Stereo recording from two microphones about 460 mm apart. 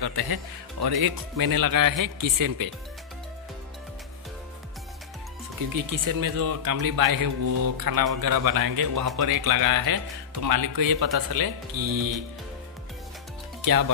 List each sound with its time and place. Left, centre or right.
0.0 s speech: right
5.9 s speech: right